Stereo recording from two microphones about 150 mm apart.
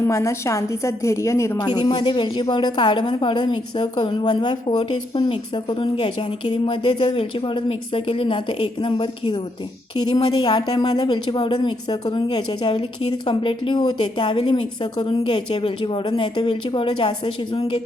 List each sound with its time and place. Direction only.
0.1 s a woman's voice: 20° left (ahead or behind); by 17.1 s 35° left (ahead or behind)